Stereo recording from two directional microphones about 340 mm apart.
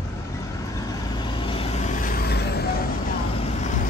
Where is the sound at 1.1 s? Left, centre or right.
Centre.